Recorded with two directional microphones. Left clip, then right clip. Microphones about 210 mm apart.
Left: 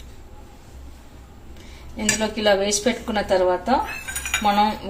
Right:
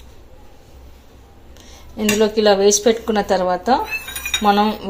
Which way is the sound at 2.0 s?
30° right (ahead or behind).